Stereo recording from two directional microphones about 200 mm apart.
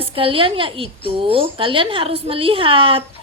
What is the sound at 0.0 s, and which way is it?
A woman's voice, 25° right (ahead or behind).